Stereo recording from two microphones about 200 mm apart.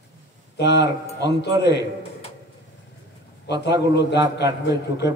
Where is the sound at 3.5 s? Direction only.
60° left (ahead or behind).